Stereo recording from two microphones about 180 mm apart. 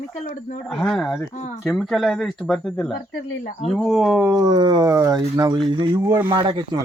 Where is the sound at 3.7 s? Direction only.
Centre (ahead or behind).